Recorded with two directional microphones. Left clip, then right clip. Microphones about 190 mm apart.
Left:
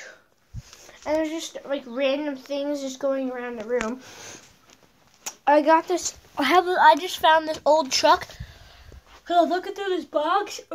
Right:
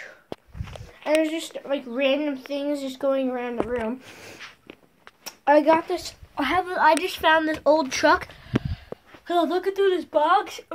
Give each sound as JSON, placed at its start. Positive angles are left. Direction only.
{"t": 1.2, "sound": "speech", "side_deg": -5}
{"t": 3.1, "sound": "speech", "side_deg": -20}
{"t": 4.1, "sound": "speech", "side_deg": -10}
{"t": 5.2, "sound": "a woman's voice", "side_deg": 0}
{"t": 6.8, "sound": "speech", "side_deg": -5}
{"t": 9.3, "sound": "speech", "side_deg": 0}